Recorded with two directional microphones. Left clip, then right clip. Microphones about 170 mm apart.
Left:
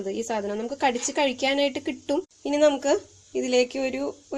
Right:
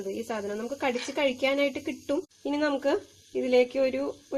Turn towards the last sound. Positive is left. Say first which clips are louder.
# left 1 dB
turn(degrees=10)  # may be behind; listen again after turning